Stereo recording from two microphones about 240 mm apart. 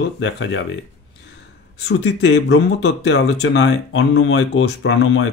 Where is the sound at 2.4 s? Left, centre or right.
Left.